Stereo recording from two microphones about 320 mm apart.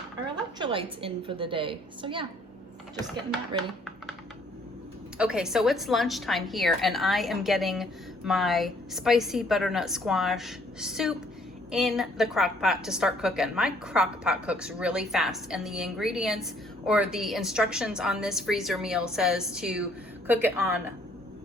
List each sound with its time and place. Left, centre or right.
0.6 s a woman's voice: centre
5.1 s a woman's voice: centre